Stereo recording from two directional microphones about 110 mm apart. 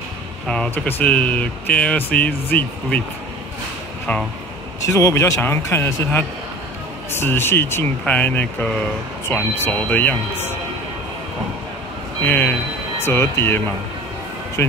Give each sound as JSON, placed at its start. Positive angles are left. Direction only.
{"t": 0.7, "sound": "speech", "side_deg": 15}
{"t": 4.1, "sound": "speech", "side_deg": 15}
{"t": 4.8, "sound": "speech", "side_deg": 30}
{"t": 12.3, "sound": "speech", "side_deg": 15}